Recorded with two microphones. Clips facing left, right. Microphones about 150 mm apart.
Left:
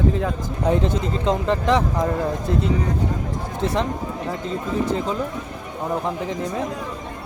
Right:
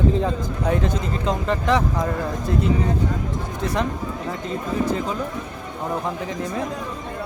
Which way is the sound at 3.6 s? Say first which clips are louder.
Left 2 dB; 25° left (ahead or behind).